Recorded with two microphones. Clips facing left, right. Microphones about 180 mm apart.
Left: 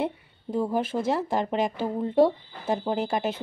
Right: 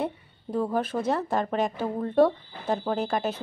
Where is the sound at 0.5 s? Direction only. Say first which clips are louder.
Left 1 dB; 10° left (ahead or behind).